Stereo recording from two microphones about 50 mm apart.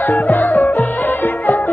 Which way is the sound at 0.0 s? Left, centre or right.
Left.